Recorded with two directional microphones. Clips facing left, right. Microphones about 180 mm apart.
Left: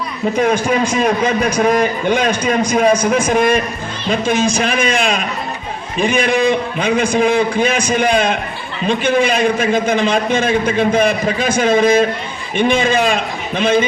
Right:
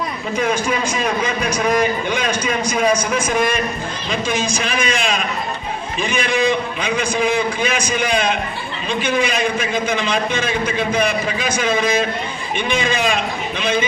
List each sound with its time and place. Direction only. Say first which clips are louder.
0.3 s a man's voice: left 4 dB; 50° left (ahead or behind)